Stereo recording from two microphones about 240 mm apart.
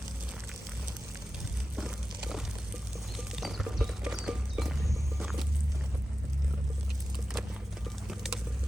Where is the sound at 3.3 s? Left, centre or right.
Centre.